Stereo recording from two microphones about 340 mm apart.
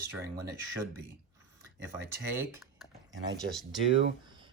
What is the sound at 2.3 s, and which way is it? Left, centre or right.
Speech, centre.